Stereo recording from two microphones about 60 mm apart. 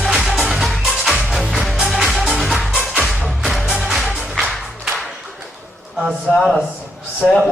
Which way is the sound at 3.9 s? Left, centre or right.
Centre.